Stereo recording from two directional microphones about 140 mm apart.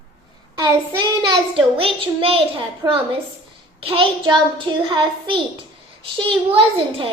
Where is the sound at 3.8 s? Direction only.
40° right (ahead or behind).